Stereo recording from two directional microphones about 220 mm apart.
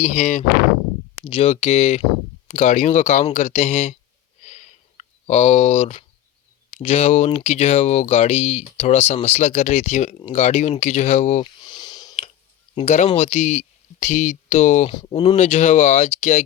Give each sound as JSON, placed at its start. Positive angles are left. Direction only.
{"t": 0.0, "sound": "speech", "side_deg": 30}
{"t": 4.4, "sound": "a sound", "side_deg": 30}
{"t": 6.7, "sound": "speech", "side_deg": 25}
{"t": 11.6, "sound": "sniff", "side_deg": 20}
{"t": 12.7, "sound": "speech", "side_deg": 30}